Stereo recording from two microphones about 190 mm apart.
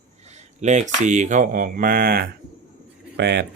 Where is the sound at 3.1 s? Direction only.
60° right (ahead or behind).